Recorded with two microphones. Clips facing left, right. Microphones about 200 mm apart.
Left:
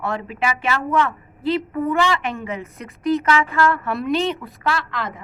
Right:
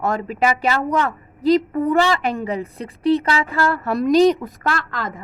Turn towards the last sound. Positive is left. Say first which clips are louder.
# even
turn(degrees=-45)  # may be behind; listen again after turning